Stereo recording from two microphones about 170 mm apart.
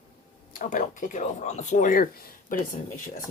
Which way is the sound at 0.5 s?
50° left (ahead or behind).